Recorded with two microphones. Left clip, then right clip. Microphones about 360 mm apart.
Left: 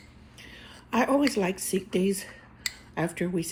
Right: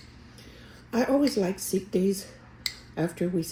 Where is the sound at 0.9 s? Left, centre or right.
Left.